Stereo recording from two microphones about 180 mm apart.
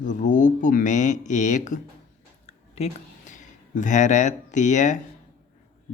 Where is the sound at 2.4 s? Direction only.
35° left (ahead or behind).